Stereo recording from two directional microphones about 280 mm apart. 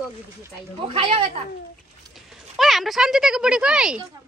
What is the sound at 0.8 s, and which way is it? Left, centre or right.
Speech, centre.